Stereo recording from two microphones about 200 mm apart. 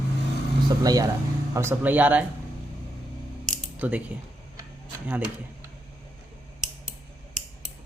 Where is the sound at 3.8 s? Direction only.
5° right (ahead or behind).